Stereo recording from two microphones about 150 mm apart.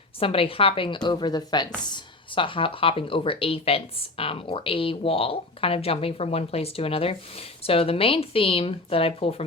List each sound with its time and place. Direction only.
0.2 s speech: 40° left (ahead or behind)